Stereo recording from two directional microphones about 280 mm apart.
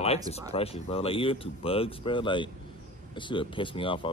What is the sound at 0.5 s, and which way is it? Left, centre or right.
A man's voice, left.